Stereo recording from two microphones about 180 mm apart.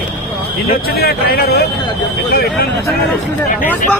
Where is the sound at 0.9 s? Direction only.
60° left (ahead or behind).